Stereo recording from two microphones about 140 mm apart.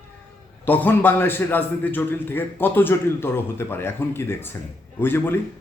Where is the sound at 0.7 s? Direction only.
15° left (ahead or behind).